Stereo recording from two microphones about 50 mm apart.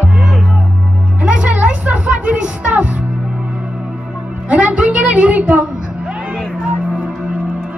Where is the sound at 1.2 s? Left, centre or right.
Right.